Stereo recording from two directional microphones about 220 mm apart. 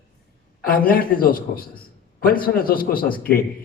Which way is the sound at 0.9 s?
40° left (ahead or behind).